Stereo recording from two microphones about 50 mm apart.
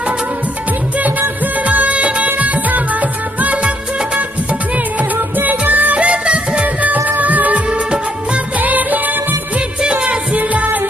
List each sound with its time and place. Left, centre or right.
1.7 s music: right
7.1 s music of bollywood: right
9.8 s music: right